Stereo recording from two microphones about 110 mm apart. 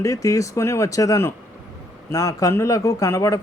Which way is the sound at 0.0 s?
30° left (ahead or behind).